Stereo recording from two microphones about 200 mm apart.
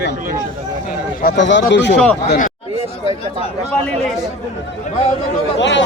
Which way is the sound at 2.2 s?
40° left (ahead or behind).